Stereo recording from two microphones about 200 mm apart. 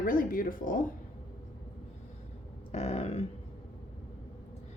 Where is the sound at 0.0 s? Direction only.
45° left (ahead or behind).